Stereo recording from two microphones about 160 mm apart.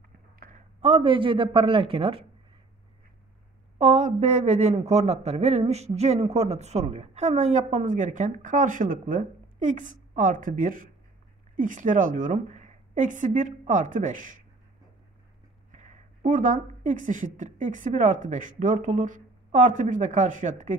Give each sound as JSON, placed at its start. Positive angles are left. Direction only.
{"t": 0.4, "sound": "a sound", "side_deg": -55}
{"t": 0.7, "sound": "speech", "side_deg": -40}
{"t": 3.7, "sound": "a man's voice", "side_deg": -45}
{"t": 15.7, "sound": "speech", "side_deg": -45}